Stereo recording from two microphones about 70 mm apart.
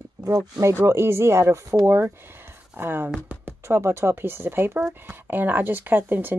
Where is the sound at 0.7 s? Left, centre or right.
Right.